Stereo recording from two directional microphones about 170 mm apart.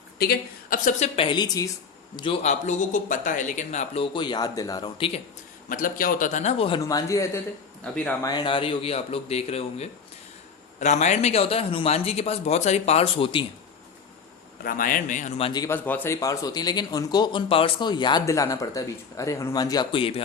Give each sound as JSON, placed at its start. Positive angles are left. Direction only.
{"t": 0.2, "sound": "speech", "side_deg": 60}
{"t": 2.4, "sound": "speech", "side_deg": 45}
{"t": 4.9, "sound": "speech", "side_deg": 35}
{"t": 5.6, "sound": "a man's voice", "side_deg": 55}
{"t": 6.7, "sound": "speech", "side_deg": 20}
{"t": 14.6, "sound": "a man's voice", "side_deg": 55}
{"t": 15.4, "sound": "speech", "side_deg": 25}
{"t": 15.7, "sound": "speech", "side_deg": 10}